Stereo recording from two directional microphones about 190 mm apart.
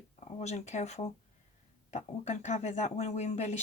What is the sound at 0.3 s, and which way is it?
Speech, 35° left (ahead or behind).